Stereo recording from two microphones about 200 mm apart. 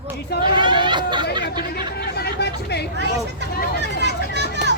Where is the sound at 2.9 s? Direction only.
60° right (ahead or behind).